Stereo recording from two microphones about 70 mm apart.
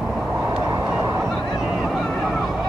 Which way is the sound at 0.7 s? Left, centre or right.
Right.